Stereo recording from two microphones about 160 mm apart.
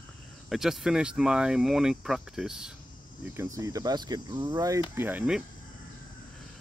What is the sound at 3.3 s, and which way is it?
Speech, 15° right (ahead or behind).